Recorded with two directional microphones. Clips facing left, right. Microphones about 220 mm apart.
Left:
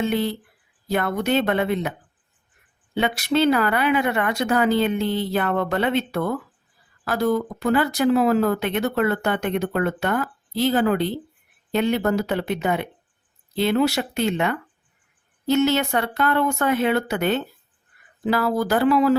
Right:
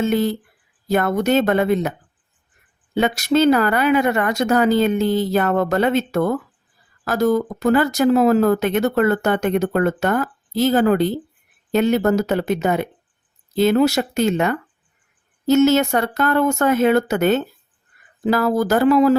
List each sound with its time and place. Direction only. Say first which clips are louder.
0.0 s speech: right 4 dB; 45° right (ahead or behind)
2.9 s speech: right 4 dB; 45° right (ahead or behind)